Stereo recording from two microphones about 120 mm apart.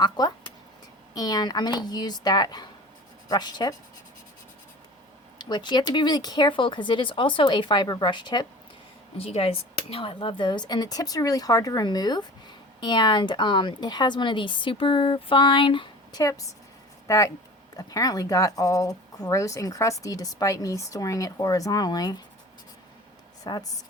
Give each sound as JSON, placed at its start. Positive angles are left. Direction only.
{"t": 0.0, "sound": "a sound", "side_deg": 35}
{"t": 1.1, "sound": "a woman's voice", "side_deg": 30}
{"t": 5.4, "sound": "a woman's voice", "side_deg": 40}
{"t": 9.1, "sound": "a woman's voice", "side_deg": 55}
{"t": 17.1, "sound": "speech", "side_deg": 25}
{"t": 23.4, "sound": "speech", "side_deg": 35}